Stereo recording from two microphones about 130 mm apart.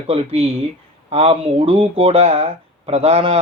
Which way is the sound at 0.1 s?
50° right (ahead or behind).